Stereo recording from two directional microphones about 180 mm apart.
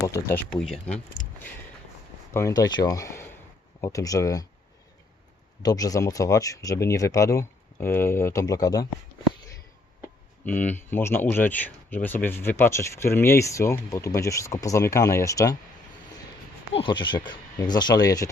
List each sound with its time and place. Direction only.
0.0 s speech: 15° left (ahead or behind)
0.5 s speech: 5° left (ahead or behind)
2.3 s speech: 20° left (ahead or behind)
5.6 s speech: 20° left (ahead or behind)
10.4 s speech: 10° left (ahead or behind)
16.7 s speech: 25° left (ahead or behind)